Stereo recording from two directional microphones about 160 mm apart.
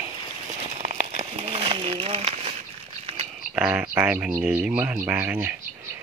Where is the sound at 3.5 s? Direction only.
5° right (ahead or behind).